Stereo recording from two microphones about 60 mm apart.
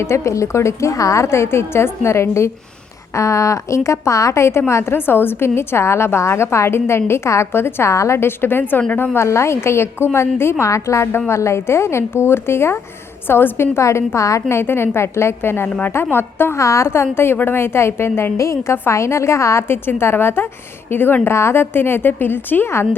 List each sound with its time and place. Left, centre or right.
0.0 s a woman's voice: left
3.2 s a woman's voice: left
9.1 s a woman's voice: left
10.7 s a woman's voice: left
14.5 s a woman's voice: left
16.6 s a woman's voice: left
18.3 s a woman's voice: left
21.2 s a woman's voice: left